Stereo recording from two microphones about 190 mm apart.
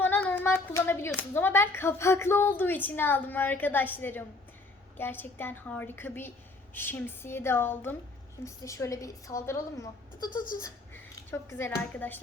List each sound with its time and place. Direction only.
0.0 s child singing: 10° left (ahead or behind)
1.3 s a woman's voice: 10° left (ahead or behind)